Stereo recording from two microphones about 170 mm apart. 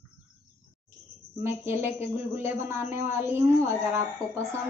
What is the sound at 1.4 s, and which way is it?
A man's voice, 15° right (ahead or behind).